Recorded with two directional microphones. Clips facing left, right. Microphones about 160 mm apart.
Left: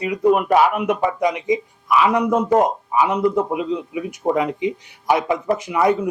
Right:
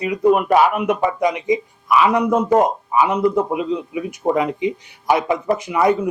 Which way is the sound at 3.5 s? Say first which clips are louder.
Right 1 dB; 15° right (ahead or behind).